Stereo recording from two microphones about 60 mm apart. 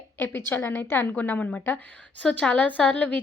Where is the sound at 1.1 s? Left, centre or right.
Left.